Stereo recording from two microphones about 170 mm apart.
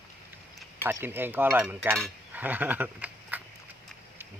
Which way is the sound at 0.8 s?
15° right (ahead or behind).